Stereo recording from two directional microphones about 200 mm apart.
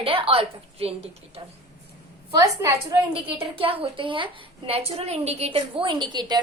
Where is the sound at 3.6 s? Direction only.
30° right (ahead or behind).